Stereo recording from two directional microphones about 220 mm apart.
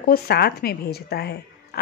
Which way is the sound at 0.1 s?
45° left (ahead or behind).